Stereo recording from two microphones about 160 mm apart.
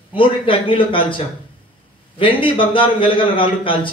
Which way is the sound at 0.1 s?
35° left (ahead or behind).